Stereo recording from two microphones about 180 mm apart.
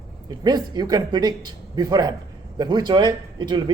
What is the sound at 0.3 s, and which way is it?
Speech, 25° right (ahead or behind).